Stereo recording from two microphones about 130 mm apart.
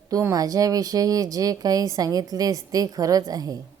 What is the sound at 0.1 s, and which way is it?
Speech, 25° right (ahead or behind).